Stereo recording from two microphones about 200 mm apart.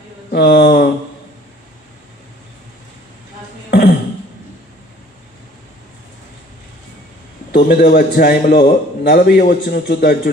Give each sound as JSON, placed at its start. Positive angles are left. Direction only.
{"t": 0.3, "sound": "a man's voice", "side_deg": 50}
{"t": 7.5, "sound": "a man's voice", "side_deg": 50}